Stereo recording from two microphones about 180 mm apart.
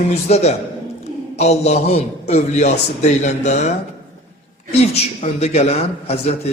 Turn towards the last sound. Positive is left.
turn(degrees=35)  # may be behind; listen again after turning